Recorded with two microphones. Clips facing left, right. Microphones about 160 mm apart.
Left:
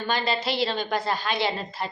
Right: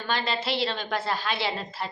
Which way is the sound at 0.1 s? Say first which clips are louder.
Left 1 dB; centre (ahead or behind).